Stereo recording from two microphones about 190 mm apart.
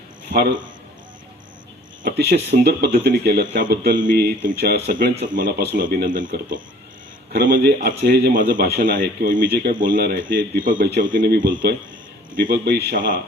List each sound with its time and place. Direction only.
0.3 s a man's voice: 60° right (ahead or behind)
2.0 s a man's voice: 60° right (ahead or behind)